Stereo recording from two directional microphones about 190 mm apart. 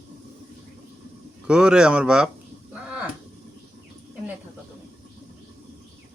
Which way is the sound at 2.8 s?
5° right (ahead or behind).